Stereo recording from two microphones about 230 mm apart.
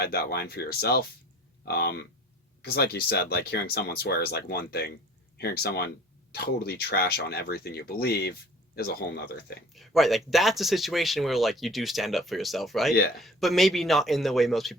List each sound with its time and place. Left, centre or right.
0.0 s speech: left
9.7 s speech: centre
12.9 s speech: left
13.2 s speech: centre